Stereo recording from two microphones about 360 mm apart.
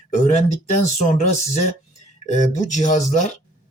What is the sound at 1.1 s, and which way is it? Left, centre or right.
Speech, centre.